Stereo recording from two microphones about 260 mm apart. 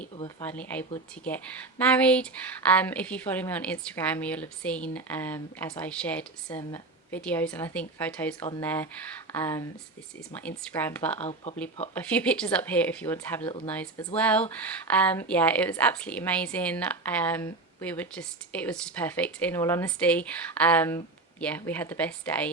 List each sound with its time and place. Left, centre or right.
0.4 s a woman's voice: centre
11.2 s speech: left
11.9 s a woman's voice: centre